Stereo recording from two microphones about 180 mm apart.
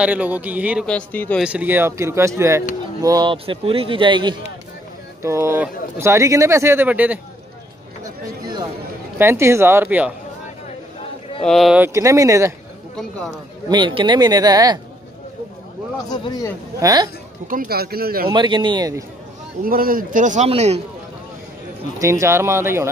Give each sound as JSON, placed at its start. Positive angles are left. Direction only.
{"t": 0.0, "sound": "speech", "side_deg": -10}
{"t": 0.8, "sound": "speech", "side_deg": 10}
{"t": 1.4, "sound": "a man's voice", "side_deg": -10}
{"t": 5.2, "sound": "speech", "side_deg": -15}
{"t": 8.0, "sound": "a sound", "side_deg": -25}
{"t": 9.2, "sound": "speech", "side_deg": -15}
{"t": 11.4, "sound": "speech", "side_deg": 0}
{"t": 11.8, "sound": "speech", "side_deg": -15}
{"t": 13.7, "sound": "a man's voice", "side_deg": -25}
{"t": 16.8, "sound": "a man's voice", "side_deg": -20}
{"t": 17.5, "sound": "speech", "side_deg": -55}
{"t": 18.3, "sound": "a man's voice", "side_deg": -25}
{"t": 19.6, "sound": "a man's voice", "side_deg": -55}
{"t": 21.9, "sound": "speech", "side_deg": -15}